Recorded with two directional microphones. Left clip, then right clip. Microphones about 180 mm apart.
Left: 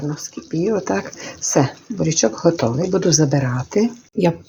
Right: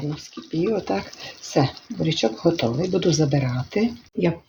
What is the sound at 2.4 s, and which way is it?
Speech, 30° left (ahead or behind).